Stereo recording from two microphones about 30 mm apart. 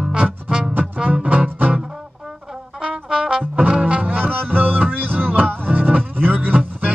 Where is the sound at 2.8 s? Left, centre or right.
Right.